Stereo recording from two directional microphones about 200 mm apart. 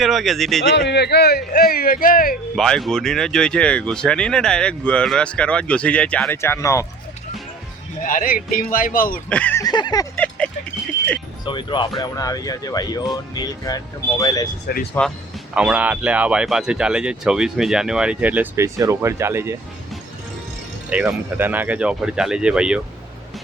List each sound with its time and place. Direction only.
0.0 s speech: centre (ahead or behind)
0.8 s speech: 55° left (ahead or behind)
2.6 s speech: centre (ahead or behind)
8.0 s speech: 45° left (ahead or behind)
9.3 s a sound: 10° left (ahead or behind)
10.2 s a sound: 5° left (ahead or behind)
11.4 s speech: 25° left (ahead or behind)
15.5 s speech: 5° right (ahead or behind)
20.9 s speech: 10° right (ahead or behind)